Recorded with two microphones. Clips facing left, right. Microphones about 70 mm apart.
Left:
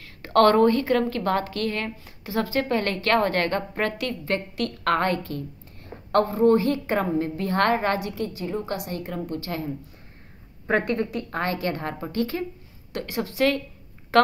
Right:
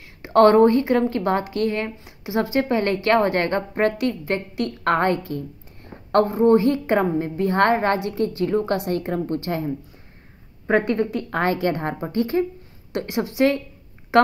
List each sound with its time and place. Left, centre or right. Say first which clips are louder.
0.0 s a woman's voice: right 3 dB; centre; by 9.2 s right
9.2 s a woman's voice: right 5 dB; right
10.7 s a woman's voice: right 4 dB; right
14.1 s a sound: right 2 dB; centre